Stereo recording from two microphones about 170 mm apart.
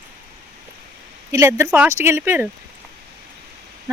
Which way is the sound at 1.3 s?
15° right (ahead or behind).